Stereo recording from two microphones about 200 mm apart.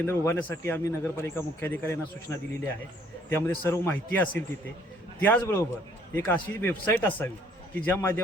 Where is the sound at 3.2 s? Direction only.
10° left (ahead or behind).